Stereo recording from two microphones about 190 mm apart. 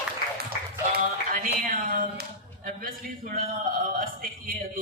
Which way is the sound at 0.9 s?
50° right (ahead or behind).